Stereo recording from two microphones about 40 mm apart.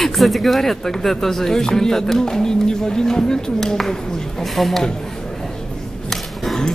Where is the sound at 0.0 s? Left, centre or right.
Centre.